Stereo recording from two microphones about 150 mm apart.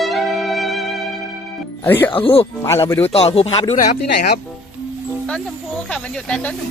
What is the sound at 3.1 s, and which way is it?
Speech, 40° left (ahead or behind).